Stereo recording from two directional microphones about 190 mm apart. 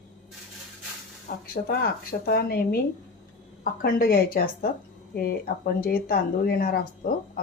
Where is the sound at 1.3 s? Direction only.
50° left (ahead or behind).